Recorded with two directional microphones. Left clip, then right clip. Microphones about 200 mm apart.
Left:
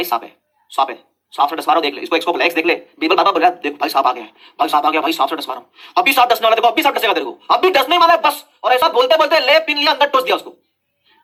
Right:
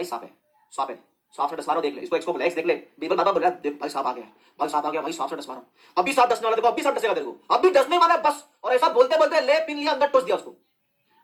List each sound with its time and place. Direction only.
1.4 s speech: 45° left (ahead or behind)